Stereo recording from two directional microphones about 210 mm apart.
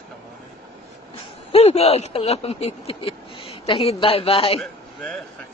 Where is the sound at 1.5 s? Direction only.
30° left (ahead or behind).